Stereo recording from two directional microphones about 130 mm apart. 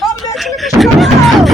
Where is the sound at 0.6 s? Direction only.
Centre (ahead or behind).